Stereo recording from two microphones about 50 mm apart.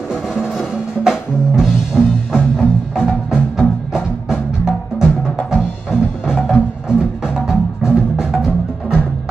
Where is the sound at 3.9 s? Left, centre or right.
Centre.